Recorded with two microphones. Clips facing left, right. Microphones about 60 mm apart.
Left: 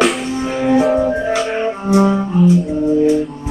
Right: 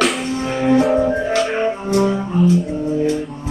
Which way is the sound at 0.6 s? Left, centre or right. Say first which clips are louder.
Left 1 dB; centre.